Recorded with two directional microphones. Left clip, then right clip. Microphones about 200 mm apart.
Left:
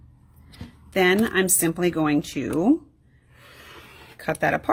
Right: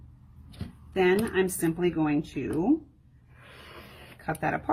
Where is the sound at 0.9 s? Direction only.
55° left (ahead or behind).